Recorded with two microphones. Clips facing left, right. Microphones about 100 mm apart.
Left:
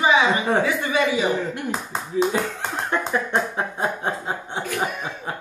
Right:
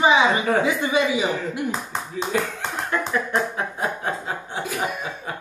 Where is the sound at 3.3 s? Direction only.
25° left (ahead or behind).